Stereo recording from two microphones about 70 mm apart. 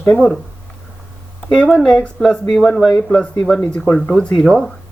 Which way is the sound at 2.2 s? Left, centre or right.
Centre.